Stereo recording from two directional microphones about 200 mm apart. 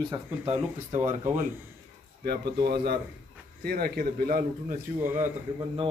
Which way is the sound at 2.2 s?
55° right (ahead or behind).